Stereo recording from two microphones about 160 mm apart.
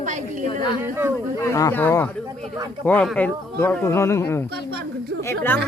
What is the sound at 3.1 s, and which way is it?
Speech, 10° left (ahead or behind).